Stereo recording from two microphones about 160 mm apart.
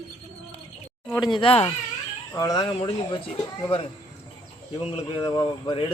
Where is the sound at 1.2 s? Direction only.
30° left (ahead or behind).